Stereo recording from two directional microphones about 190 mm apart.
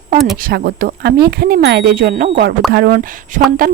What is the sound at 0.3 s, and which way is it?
Speech, 50° right (ahead or behind).